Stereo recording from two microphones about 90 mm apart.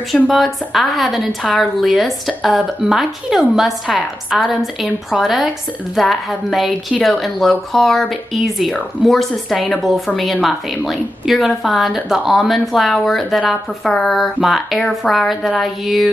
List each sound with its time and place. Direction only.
0.1 s a woman's voice: centre (ahead or behind)